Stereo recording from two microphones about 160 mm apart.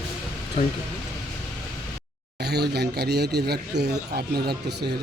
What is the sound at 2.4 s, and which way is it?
Speech, 90° right.